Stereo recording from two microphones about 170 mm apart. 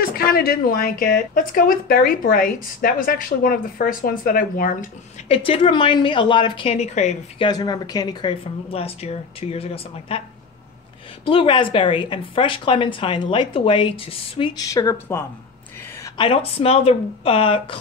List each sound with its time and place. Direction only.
0.0 s a woman's voice: 60° left (ahead or behind)
5.3 s a woman's voice: 35° left (ahead or behind)
7.4 s speech: 25° left (ahead or behind)
11.2 s a woman's voice: 30° left (ahead or behind)
14.7 s speech: 20° left (ahead or behind)
16.2 s a woman's voice: 35° left (ahead or behind)